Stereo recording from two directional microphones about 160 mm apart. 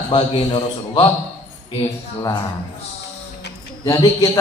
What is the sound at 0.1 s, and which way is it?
A man's voice, 35° left (ahead or behind).